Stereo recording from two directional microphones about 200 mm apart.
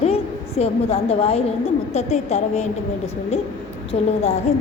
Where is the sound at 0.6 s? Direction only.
30° left (ahead or behind).